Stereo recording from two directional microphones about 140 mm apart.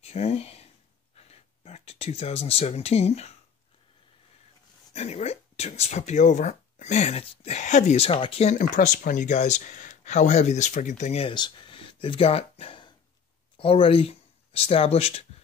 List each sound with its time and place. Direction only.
0.0 s speech: 50° left (ahead or behind)
1.1 s a sound: 50° left (ahead or behind)
4.9 s speech: 50° left (ahead or behind)
8.5 s speech: 70° left (ahead or behind)
11.2 s speech: 35° left (ahead or behind)